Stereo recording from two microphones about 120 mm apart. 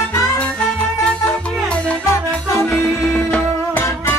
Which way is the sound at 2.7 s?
15° left (ahead or behind).